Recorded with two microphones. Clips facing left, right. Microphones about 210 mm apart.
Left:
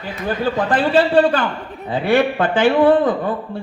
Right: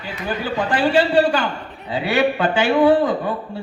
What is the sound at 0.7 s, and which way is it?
A man's voice, 55° left (ahead or behind).